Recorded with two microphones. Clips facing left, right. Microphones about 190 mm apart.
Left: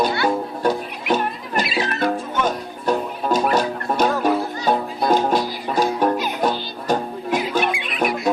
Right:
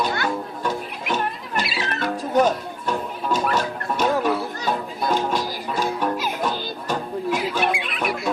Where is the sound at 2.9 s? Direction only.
35° left (ahead or behind).